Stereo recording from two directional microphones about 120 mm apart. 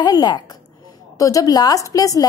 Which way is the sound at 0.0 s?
35° left (ahead or behind).